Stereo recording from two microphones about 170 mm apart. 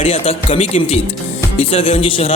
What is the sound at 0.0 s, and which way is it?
Speech, 35° left (ahead or behind).